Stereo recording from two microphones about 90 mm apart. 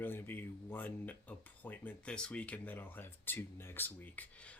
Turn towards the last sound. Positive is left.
turn(degrees=20)  # may be behind; listen again after turning